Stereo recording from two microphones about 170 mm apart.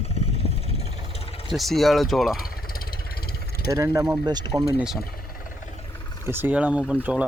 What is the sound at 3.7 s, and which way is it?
Speech, 20° right (ahead or behind).